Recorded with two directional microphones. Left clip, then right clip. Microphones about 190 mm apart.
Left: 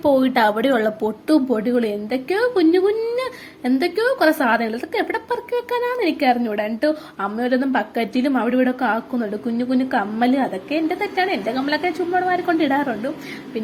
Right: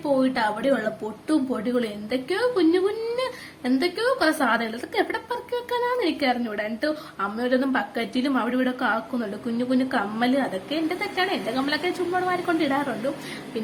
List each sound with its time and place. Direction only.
0.0 s a woman's voice: 35° left (ahead or behind)
1.5 s a woman's voice: 20° left (ahead or behind)